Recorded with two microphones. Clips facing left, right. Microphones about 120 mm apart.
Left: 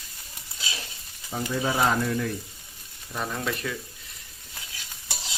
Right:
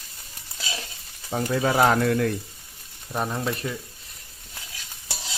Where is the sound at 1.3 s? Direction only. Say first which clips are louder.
Right 4 dB; 55° right (ahead or behind).